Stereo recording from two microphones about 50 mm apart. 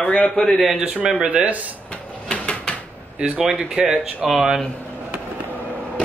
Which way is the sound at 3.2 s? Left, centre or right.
Centre.